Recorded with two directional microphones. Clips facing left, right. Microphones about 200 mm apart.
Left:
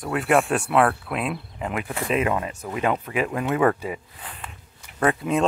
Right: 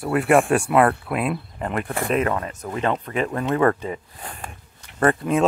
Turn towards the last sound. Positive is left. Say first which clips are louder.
# right 2 dB
turn(degrees=0)  # may be behind; listen again after turning